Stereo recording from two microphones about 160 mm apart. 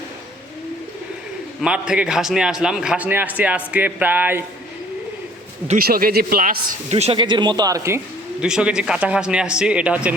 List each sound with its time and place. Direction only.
1.6 s a man's voice: 5° right (ahead or behind)
5.6 s a man's voice: 60° right (ahead or behind)
6.9 s speech: 35° right (ahead or behind); by 8.0 s 20° right (ahead or behind)
8.4 s a man's voice: 5° right (ahead or behind)